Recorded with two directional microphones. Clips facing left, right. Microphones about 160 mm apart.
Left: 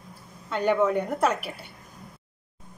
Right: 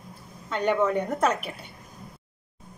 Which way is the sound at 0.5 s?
5° left (ahead or behind).